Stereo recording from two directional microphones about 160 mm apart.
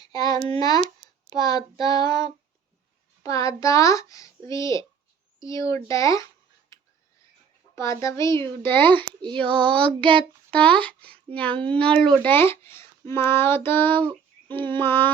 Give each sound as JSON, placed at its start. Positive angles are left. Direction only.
{"t": 0.0, "sound": "a child's voice", "side_deg": 25}
{"t": 6.7, "sound": "a sound", "side_deg": 20}
{"t": 7.8, "sound": "a child's voice", "side_deg": 20}